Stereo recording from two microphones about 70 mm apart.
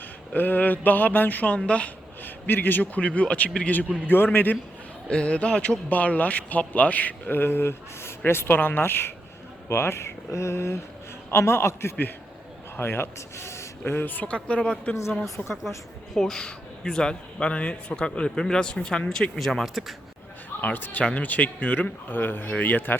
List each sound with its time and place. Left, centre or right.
0.3 s a man's voice: left
2.2 s a man's voice: left
5.0 s a man's voice: centre; by 13.9 s left
13.9 s a man's voice: left
16.1 s a man's voice: centre
20.6 s a man's voice: left
21.0 s a man's voice: centre